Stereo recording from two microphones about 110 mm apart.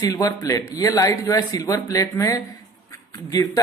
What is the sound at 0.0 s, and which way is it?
Speech, 35° left (ahead or behind).